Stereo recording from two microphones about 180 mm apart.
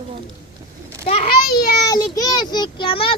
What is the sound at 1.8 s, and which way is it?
A child's voice, 20° left (ahead or behind).